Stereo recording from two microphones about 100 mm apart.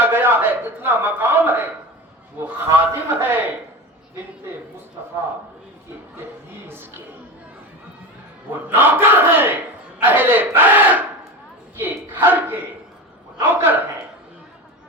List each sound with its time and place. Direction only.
0.0 s a man's voice: 20° right (ahead or behind)
8.4 s speech: 20° right (ahead or behind)